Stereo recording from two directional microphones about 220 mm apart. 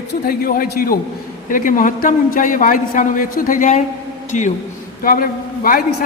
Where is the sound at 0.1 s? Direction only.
40° left (ahead or behind).